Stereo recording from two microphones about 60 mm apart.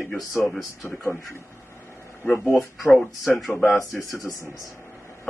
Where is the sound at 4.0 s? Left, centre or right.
Left.